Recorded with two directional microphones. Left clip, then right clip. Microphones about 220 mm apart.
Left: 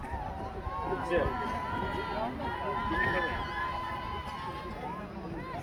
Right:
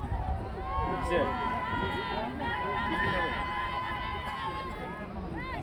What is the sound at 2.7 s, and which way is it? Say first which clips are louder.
Run: left 2 dB; 20° right (ahead or behind).